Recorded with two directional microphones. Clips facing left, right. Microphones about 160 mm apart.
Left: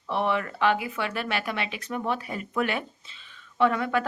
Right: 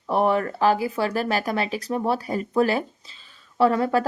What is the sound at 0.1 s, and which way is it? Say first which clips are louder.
Speech: right 6 dB; 40° right (ahead or behind).